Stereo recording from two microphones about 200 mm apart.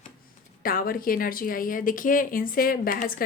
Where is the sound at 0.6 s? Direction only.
45° left (ahead or behind).